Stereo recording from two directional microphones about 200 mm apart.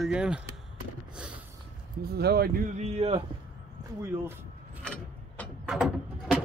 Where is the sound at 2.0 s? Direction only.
50° right (ahead or behind).